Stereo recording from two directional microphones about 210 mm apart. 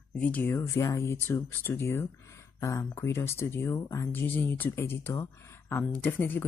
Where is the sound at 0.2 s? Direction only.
10° left (ahead or behind).